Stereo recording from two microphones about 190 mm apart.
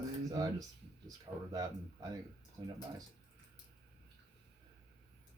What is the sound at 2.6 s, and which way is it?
Speech, 25° right (ahead or behind).